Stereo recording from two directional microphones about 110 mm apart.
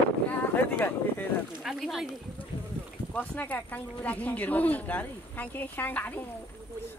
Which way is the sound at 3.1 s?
15° left (ahead or behind).